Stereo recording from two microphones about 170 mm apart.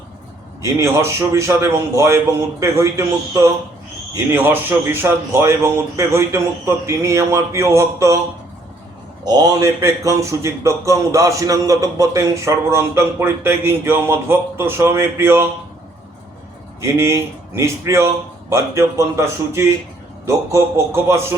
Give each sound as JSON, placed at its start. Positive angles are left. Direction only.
{"t": 0.6, "sound": "a man's voice", "side_deg": -15}
{"t": 9.2, "sound": "a man's voice", "side_deg": -20}
{"t": 16.8, "sound": "a man's voice", "side_deg": -15}